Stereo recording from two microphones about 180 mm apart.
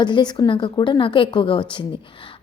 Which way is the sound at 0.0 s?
25° left (ahead or behind).